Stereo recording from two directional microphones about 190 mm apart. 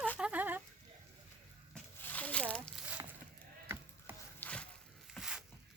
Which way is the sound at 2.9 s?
10° right (ahead or behind).